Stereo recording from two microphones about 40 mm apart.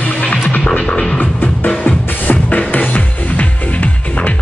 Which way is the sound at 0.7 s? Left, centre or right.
Left.